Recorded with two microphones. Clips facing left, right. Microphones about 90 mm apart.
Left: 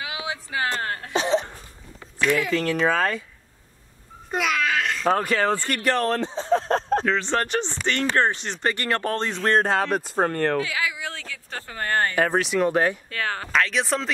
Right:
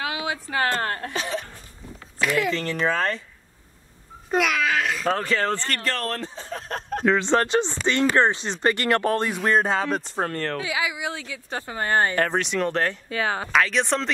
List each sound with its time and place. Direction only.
0.0 s speech: 45° right (ahead or behind)
1.1 s a sound: 20° left (ahead or behind)
2.1 s speech: centre (ahead or behind)
4.3 s babbling: centre (ahead or behind)
5.0 s speech: 10° left (ahead or behind); by 7.1 s 30° left (ahead or behind)
7.1 s speech: 20° right (ahead or behind); by 10.6 s 15° left (ahead or behind)
10.6 s speech: 20° right (ahead or behind)
12.2 s speech: 5° left (ahead or behind)
13.1 s speech: 15° right (ahead or behind)
13.5 s speech: centre (ahead or behind)